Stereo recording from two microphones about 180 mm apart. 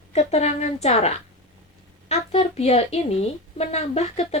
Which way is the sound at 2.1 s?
35° left (ahead or behind).